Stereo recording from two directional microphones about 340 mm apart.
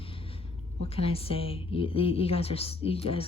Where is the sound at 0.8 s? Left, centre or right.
Centre.